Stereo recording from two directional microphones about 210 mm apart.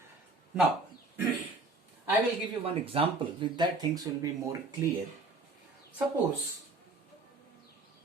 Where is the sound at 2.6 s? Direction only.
25° right (ahead or behind).